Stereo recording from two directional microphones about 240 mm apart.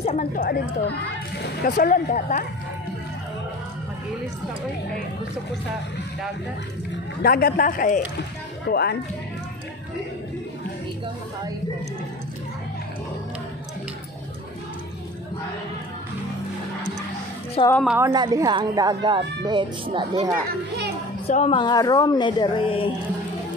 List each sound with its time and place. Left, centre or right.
0.0 s speech: left
7.2 s speech: left
17.6 s speech: left
17.9 s speech: centre
21.3 s speech: left